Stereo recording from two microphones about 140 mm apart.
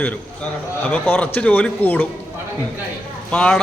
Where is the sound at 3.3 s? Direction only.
10° left (ahead or behind).